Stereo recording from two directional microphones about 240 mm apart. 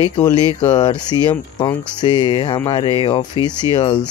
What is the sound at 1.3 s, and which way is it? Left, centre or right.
Speech, centre.